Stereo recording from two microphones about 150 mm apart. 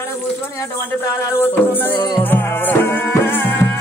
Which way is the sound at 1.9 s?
30° left (ahead or behind).